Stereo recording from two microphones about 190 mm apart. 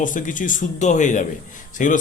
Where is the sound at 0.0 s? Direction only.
45° left (ahead or behind).